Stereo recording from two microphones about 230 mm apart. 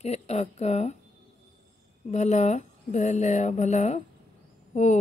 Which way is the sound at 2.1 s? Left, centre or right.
Left.